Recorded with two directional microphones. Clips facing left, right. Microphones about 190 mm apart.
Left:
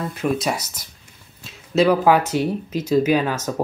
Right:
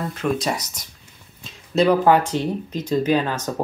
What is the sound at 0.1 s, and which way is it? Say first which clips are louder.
Speech: left 1 dB; 10° left (ahead or behind).